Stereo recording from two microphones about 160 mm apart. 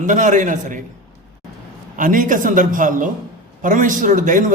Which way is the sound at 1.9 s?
55° right (ahead or behind).